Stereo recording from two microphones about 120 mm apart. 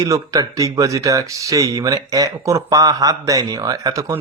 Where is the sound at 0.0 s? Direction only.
25° right (ahead or behind).